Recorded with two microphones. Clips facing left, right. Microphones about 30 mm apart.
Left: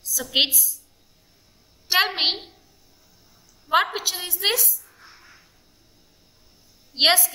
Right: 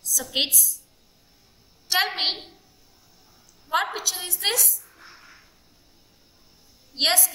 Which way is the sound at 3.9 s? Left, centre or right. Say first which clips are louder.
Left 2 dB; left.